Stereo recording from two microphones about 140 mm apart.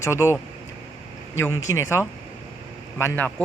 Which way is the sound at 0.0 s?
20° left (ahead or behind).